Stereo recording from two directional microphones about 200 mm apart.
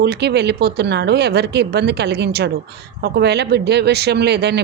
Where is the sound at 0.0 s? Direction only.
55° right (ahead or behind).